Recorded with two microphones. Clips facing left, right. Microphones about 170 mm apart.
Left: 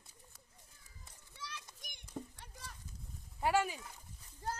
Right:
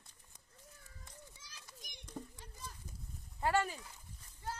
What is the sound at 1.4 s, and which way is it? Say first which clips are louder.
Children playing: left 11 dB; 70° left (ahead or behind).